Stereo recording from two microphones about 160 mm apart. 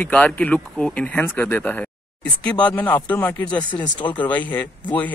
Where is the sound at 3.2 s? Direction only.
10° left (ahead or behind).